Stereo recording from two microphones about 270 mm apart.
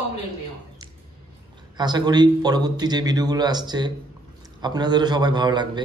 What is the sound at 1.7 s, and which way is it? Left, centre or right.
A man's voice, centre.